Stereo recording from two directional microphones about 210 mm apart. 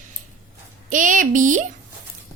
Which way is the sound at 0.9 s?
40° right (ahead or behind).